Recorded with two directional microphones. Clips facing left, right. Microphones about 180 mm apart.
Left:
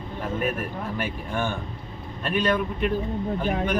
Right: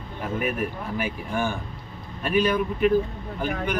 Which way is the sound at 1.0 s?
10° right (ahead or behind).